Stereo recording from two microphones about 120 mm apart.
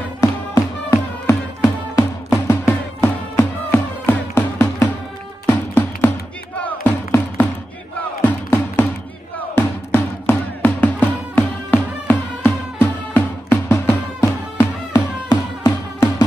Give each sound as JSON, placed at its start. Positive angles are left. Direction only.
{"t": 0.2, "sound": "music", "side_deg": 25}